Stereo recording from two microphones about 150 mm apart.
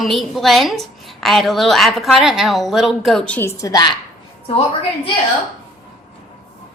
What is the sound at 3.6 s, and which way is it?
Speech, 25° left (ahead or behind).